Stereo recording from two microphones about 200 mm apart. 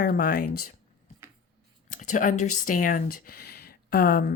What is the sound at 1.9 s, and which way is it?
Speech, 40° left (ahead or behind).